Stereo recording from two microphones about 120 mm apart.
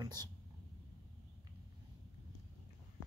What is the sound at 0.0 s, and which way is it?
Speech, 35° right (ahead or behind).